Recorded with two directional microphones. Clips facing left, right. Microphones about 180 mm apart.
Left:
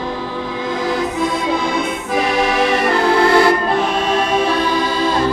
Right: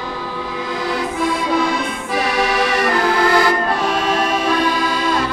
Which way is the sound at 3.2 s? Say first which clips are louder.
Left 3 dB; 25° left (ahead or behind).